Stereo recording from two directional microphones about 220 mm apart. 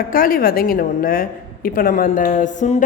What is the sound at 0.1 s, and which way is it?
A woman's voice, 40° left (ahead or behind).